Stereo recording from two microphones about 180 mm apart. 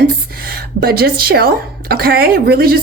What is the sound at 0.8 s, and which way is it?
Speech, 60° right (ahead or behind).